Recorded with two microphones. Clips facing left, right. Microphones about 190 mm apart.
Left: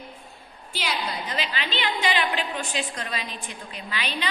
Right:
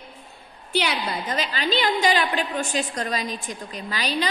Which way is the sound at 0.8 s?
45° right (ahead or behind).